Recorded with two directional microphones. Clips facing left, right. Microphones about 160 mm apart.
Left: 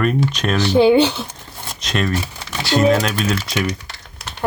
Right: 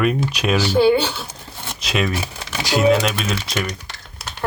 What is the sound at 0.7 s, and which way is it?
Speech, 20° left (ahead or behind).